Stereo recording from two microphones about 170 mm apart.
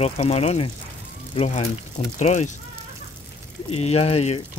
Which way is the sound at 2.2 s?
40° left (ahead or behind).